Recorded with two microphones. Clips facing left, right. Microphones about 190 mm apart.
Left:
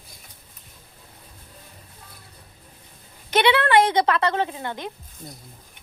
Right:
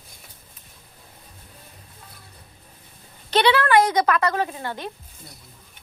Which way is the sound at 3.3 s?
20° left (ahead or behind).